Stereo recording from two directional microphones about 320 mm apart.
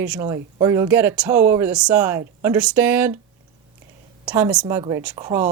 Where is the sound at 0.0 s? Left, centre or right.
Centre.